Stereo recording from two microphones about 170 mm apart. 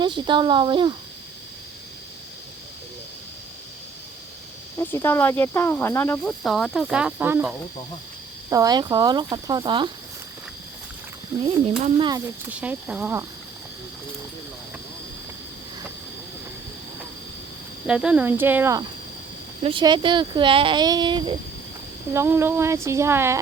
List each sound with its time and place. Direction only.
0.0 s speech: 30° right (ahead or behind)
4.8 s speech: 15° left (ahead or behind)
6.4 s speech: centre (ahead or behind)
8.4 s speech: 20° right (ahead or behind)
11.8 s speech: 30° right (ahead or behind)
12.5 s speech: 10° right (ahead or behind)
17.8 s speech: 5° right (ahead or behind)
19.6 s speech: 30° right (ahead or behind)
22.1 s speech: 15° right (ahead or behind)